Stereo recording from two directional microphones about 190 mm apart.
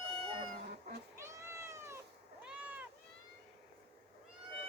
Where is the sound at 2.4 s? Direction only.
5° right (ahead or behind).